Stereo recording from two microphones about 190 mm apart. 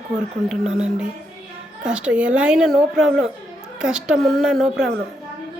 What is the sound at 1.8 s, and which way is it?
A woman's voice, 5° right (ahead or behind).